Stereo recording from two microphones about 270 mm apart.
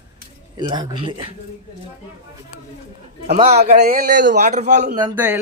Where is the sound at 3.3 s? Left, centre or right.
Right.